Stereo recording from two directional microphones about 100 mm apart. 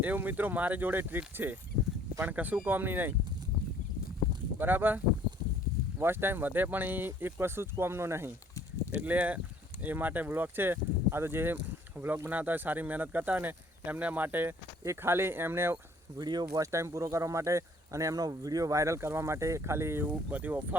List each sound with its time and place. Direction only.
0.0 s speech: 15° right (ahead or behind)
4.5 s speech: 20° right (ahead or behind)
6.0 s speech: 20° right (ahead or behind)
16.1 s speech: 45° right (ahead or behind)
16.7 s speech: 30° right (ahead or behind)